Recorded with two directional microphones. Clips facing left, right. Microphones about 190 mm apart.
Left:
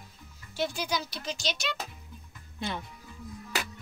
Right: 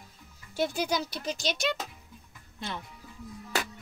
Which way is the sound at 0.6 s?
55° right (ahead or behind).